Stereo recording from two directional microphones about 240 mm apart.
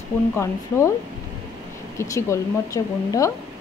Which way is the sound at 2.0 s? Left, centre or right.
Centre.